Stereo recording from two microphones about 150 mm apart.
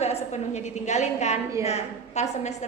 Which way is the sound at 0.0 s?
45° left (ahead or behind).